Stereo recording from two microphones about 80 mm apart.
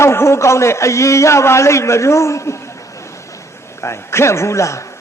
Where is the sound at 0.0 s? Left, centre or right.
Left.